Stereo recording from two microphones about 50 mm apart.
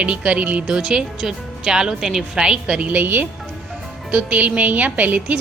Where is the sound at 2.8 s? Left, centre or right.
Right.